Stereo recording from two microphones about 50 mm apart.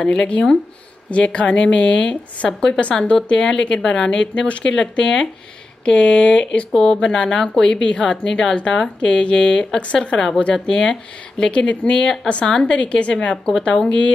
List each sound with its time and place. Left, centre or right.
0.0 s speech: centre
6.7 s speech: centre